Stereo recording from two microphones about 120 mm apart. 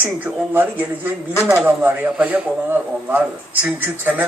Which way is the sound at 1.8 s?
15° right (ahead or behind).